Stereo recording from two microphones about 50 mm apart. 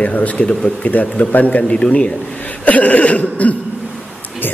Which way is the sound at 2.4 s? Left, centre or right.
Left.